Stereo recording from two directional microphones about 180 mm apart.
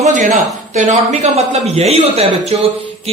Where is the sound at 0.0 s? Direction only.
40° right (ahead or behind).